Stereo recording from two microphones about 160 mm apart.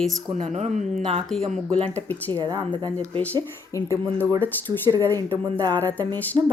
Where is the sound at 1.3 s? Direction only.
Centre (ahead or behind).